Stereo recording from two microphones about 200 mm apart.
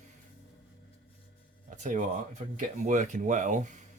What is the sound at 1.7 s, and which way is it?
Speech, 40° right (ahead or behind).